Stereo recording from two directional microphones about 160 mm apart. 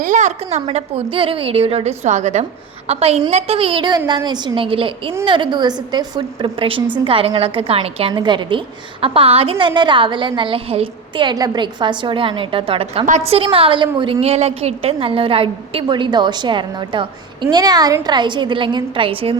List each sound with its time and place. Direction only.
0.0 s a woman's voice: 50° right (ahead or behind)